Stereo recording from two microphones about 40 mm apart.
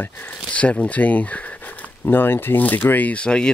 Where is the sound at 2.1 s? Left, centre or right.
Left.